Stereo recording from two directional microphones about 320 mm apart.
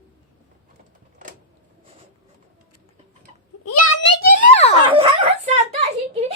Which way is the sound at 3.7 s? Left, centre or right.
Left.